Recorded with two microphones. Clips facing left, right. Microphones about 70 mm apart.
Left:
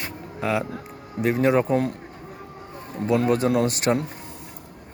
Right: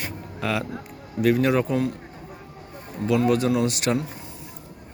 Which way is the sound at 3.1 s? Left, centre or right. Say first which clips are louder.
Even; left.